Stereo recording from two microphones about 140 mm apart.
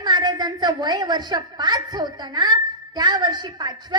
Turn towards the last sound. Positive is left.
turn(degrees=-30)  # may be behind; listen again after turning